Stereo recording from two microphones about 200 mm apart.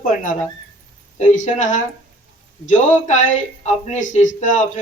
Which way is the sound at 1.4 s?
40° left (ahead or behind).